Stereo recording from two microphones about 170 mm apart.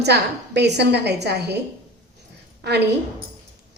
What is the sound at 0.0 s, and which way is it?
A woman's voice, 80° right.